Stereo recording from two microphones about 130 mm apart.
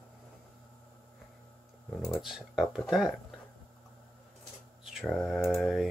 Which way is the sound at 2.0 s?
Centre (ahead or behind).